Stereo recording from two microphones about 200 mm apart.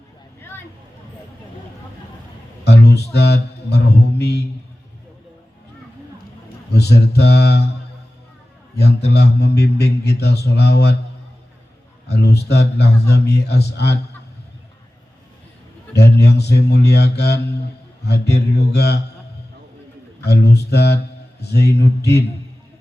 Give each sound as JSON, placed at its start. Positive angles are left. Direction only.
{"t": 2.6, "sound": "speech", "side_deg": 55}
{"t": 6.7, "sound": "a man's voice", "side_deg": 55}
{"t": 9.0, "sound": "a man's voice", "side_deg": 55}
{"t": 12.1, "sound": "a man's voice", "side_deg": 55}
{"t": 16.2, "sound": "a man's voice", "side_deg": 55}
{"t": 20.2, "sound": "a man's voice", "side_deg": 55}